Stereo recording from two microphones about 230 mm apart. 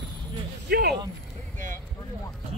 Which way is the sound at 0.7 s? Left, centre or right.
Right.